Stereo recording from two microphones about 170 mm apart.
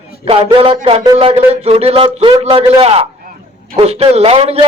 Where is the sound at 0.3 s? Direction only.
35° right (ahead or behind).